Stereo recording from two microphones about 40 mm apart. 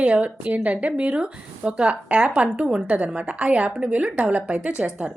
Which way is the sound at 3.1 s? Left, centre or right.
Right.